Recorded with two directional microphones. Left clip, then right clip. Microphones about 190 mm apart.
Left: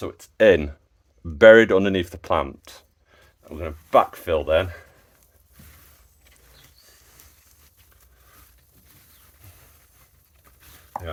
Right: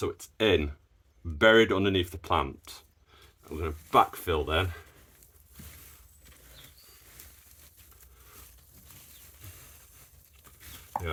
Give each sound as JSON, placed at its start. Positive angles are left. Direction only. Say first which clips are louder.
{"t": 0.3, "sound": "speech", "louder": "left 10 dB", "side_deg": 50}
{"t": 10.9, "sound": "stir", "louder": "left 1 dB", "side_deg": -20}